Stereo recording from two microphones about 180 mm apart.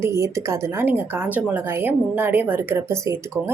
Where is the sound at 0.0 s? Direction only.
15° right (ahead or behind).